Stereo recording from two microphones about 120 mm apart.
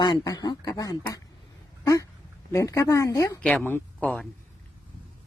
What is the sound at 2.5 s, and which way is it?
Speech, 25° left (ahead or behind).